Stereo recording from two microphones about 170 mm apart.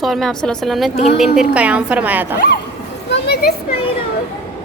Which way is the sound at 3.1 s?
75° left (ahead or behind).